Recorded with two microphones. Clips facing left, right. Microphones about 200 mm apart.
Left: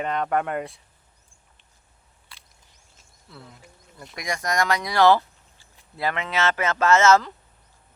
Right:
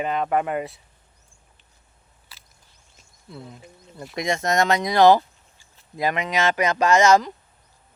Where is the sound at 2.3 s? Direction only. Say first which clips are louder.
Left 1 dB; 5° right (ahead or behind).